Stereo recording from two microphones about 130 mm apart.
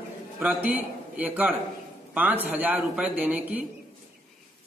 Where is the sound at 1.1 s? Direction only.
10° right (ahead or behind).